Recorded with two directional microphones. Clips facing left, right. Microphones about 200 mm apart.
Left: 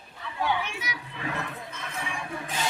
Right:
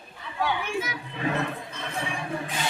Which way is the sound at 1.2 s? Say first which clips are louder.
Right 6 dB; 25° right (ahead or behind).